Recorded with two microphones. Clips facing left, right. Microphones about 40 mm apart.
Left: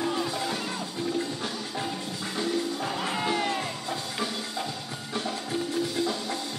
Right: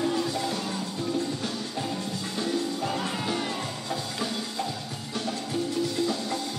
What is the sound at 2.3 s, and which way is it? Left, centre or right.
Music, centre.